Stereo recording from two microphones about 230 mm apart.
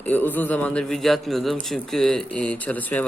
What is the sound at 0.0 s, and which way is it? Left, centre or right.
Speech, centre.